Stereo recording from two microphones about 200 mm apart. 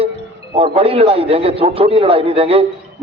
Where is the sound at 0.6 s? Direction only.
30° right (ahead or behind).